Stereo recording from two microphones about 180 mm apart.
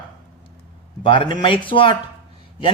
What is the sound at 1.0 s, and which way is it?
Speech, 25° left (ahead or behind).